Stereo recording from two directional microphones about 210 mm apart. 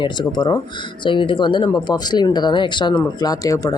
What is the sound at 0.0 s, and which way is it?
Speech, 20° left (ahead or behind).